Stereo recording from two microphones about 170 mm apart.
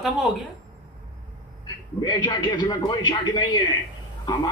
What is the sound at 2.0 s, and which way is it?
A man's voice, 25° left (ahead or behind).